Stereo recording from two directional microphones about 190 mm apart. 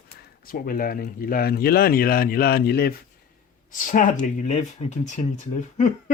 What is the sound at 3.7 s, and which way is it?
Speech, 45° left (ahead or behind).